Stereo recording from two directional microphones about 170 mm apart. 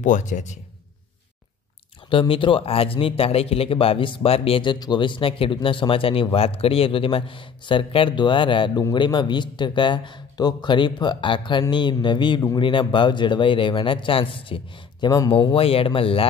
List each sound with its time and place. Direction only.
0.0 s speech: 45° left (ahead or behind)
2.0 s a man's voice: 30° left (ahead or behind)